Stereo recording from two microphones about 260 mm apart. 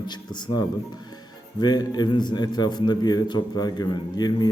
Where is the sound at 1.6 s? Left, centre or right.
Centre.